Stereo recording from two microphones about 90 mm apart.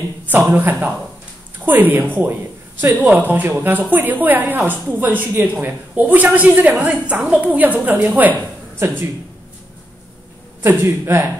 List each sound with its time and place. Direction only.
0.3 s a woman's voice: 20° right (ahead or behind)
10.6 s a woman's voice: 25° right (ahead or behind)